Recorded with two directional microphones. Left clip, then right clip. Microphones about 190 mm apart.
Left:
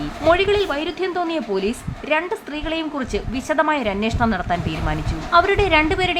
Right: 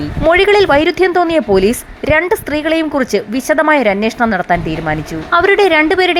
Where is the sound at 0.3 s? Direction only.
35° right (ahead or behind).